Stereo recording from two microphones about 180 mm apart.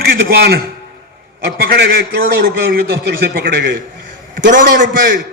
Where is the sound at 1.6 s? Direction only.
60° right (ahead or behind).